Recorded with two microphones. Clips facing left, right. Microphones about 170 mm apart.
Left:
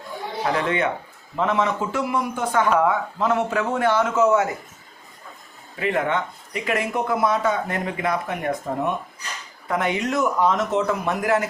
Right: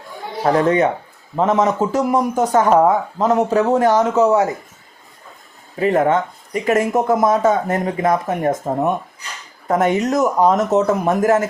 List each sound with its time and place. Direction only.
0.4 s speech: 40° right (ahead or behind)
5.7 s speech: 40° right (ahead or behind)
9.6 s speech: 45° right (ahead or behind)